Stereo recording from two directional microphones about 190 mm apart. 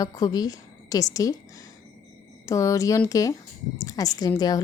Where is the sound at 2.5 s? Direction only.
15° left (ahead or behind).